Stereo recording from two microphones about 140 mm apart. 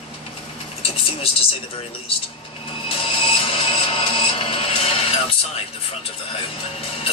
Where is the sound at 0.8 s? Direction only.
45° left (ahead or behind).